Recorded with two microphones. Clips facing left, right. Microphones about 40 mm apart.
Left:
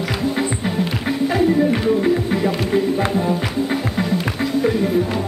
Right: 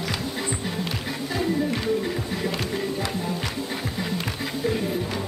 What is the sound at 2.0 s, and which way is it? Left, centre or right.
Music, left.